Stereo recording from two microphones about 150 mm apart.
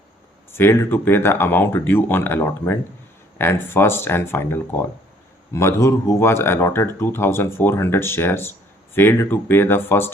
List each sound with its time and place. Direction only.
0.5 s speech: 15° left (ahead or behind)